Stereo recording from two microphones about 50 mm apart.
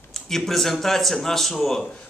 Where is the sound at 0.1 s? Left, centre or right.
Centre.